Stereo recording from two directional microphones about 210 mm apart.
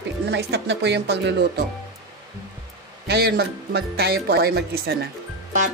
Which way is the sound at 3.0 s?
50° right (ahead or behind).